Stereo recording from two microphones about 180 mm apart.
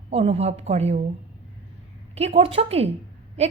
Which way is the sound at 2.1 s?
35° right (ahead or behind).